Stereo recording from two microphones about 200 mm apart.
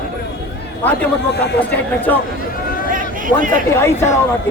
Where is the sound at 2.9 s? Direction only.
40° right (ahead or behind).